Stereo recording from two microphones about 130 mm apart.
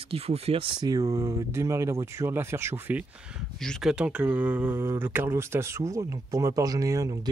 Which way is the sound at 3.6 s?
Centre (ahead or behind).